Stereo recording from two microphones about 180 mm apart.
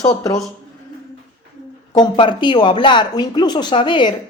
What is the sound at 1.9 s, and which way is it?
Speech, 25° left (ahead or behind).